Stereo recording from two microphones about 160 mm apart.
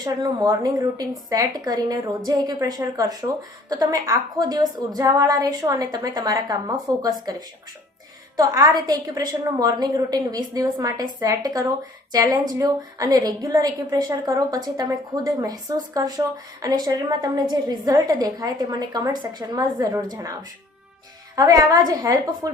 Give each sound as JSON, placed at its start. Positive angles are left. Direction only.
{"t": 0.0, "sound": "a woman's voice", "side_deg": -25}
{"t": 21.3, "sound": "a woman's voice", "side_deg": -25}